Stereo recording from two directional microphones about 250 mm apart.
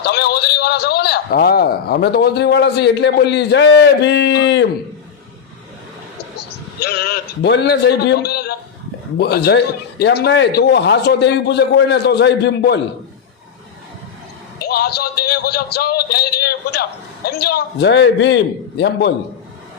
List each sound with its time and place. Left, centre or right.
0.0 s a man's voice: left
6.3 s a man's voice: left
14.6 s a sound: left
17.2 s a man's voice: left